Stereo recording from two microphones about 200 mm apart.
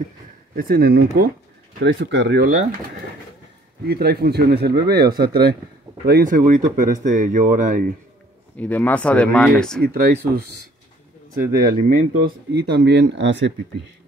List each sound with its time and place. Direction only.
0.6 s speech: 50° right (ahead or behind)
3.8 s speech: 50° right (ahead or behind)
8.5 s speech: 10° left (ahead or behind)
9.8 s speech: 50° right (ahead or behind)
11.7 s speech: 50° right (ahead or behind)